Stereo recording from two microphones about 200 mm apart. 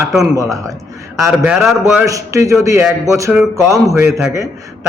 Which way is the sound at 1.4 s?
5° right (ahead or behind).